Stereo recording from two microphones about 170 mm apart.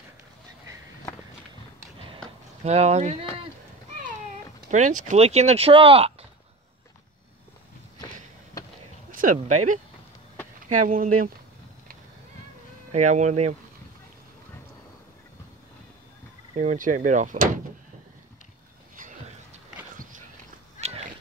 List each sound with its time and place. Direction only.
2.6 s speech: 40° right (ahead or behind)
4.6 s speech: 45° right (ahead or behind)
9.2 s speech: 50° right (ahead or behind)
12.9 s speech: 45° right (ahead or behind)
16.5 s speech: 50° right (ahead or behind)
18.9 s a sound: 50° right (ahead or behind)
20.0 s walk: 50° right (ahead or behind)
20.8 s cat: 50° left (ahead or behind)